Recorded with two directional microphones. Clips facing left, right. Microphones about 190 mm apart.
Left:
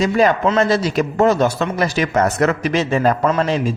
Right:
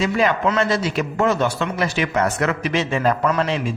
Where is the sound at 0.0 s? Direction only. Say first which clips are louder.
Left 4 dB; 40° left (ahead or behind).